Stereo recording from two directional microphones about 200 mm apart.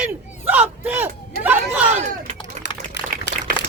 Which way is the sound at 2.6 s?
60° left (ahead or behind).